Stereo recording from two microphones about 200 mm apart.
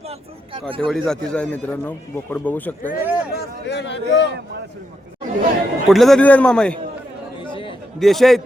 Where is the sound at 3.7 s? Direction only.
60° left (ahead or behind).